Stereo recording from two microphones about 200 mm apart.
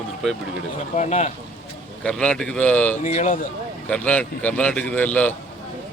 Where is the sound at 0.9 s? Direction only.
35° left (ahead or behind).